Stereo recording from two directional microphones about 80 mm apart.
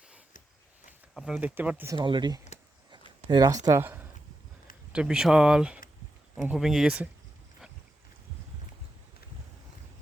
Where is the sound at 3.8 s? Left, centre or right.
Right.